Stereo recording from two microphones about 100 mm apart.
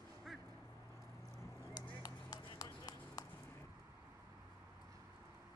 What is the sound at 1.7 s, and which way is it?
Run, 40° left (ahead or behind).